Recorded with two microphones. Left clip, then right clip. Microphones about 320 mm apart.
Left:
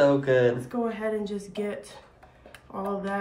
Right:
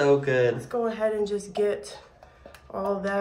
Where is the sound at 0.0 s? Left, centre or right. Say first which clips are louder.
Even; centre.